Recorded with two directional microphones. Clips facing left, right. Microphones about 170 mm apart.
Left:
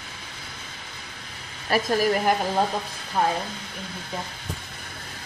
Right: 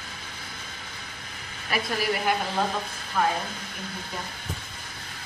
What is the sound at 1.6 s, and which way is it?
Speech, 40° left (ahead or behind).